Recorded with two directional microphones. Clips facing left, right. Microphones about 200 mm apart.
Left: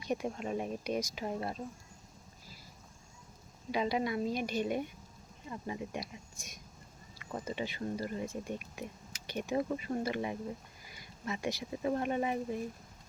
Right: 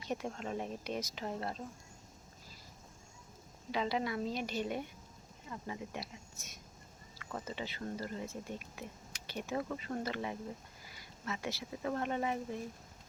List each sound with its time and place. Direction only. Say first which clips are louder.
0.0 s speech: left 4 dB; 15° left (ahead or behind)
3.7 s speech: left 3 dB; 15° left (ahead or behind)